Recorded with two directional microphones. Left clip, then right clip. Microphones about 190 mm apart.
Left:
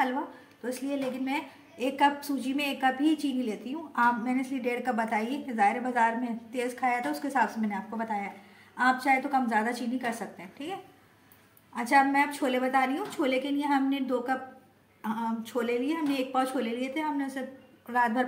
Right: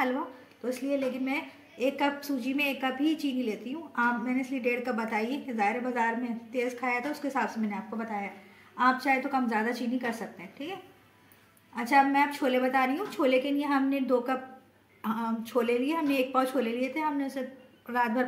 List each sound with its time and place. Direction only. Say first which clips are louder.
0.7 s a woman's voice: right 2 dB; 10° left (ahead or behind)
8.7 s a woman's voice: left 1 dB; 5° left (ahead or behind)